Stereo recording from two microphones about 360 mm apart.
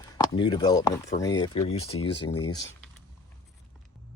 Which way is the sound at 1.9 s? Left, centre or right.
Left.